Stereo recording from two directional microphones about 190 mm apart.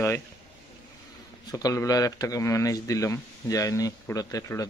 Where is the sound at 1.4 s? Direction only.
20° left (ahead or behind).